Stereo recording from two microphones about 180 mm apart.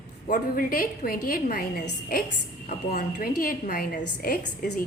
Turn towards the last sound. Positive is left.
turn(degrees=55)  # may be behind; listen again after turning